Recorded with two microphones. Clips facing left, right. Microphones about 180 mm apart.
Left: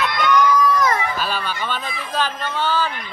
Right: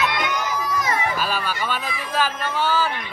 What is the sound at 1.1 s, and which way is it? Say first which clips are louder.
Speech: even; 10° right (ahead or behind).